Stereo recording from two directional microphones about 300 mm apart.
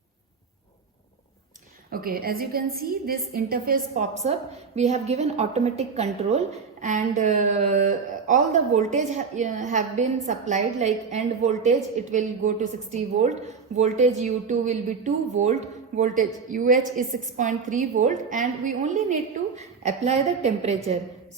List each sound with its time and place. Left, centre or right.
1.9 s a woman's voice: right